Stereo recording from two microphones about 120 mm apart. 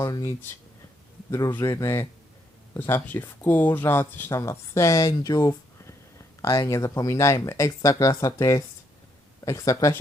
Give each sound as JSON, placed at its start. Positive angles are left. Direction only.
{"t": 0.0, "sound": "speech", "side_deg": 30}